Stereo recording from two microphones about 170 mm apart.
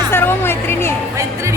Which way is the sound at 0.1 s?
15° left (ahead or behind).